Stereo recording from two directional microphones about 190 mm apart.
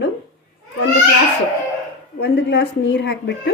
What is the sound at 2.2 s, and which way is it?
A woman's voice, 65° left (ahead or behind).